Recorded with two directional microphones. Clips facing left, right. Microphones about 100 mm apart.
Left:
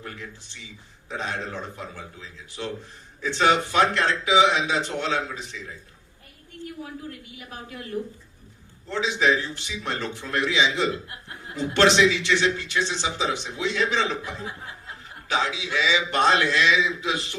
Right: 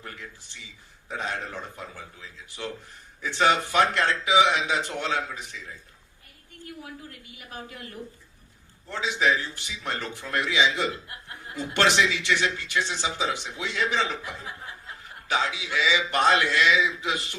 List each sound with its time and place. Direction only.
0.0 s a sound: 20° left (ahead or behind)
1.0 s a man's voice: 20° left (ahead or behind)
6.8 s a man's voice: 25° left (ahead or behind)
9.0 s a man's voice: 20° left (ahead or behind)
15.5 s a man's voice: 20° left (ahead or behind)